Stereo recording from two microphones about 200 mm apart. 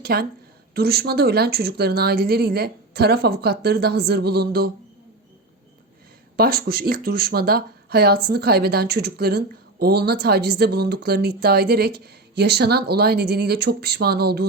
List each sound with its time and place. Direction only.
0.0 s a woman's voice: 50° right (ahead or behind)
6.3 s speech: 50° right (ahead or behind)